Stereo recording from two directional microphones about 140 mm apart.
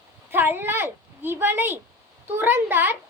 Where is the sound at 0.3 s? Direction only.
15° right (ahead or behind).